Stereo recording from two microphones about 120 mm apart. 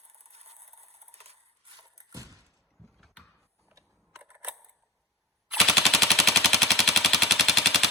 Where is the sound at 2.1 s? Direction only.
25° right (ahead or behind).